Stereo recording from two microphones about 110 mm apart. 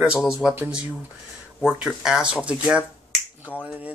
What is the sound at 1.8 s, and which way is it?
Speech, 5° right (ahead or behind).